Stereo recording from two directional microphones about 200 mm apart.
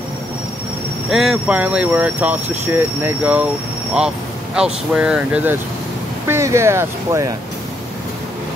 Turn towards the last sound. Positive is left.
turn(degrees=-15)  # may be behind; listen again after turning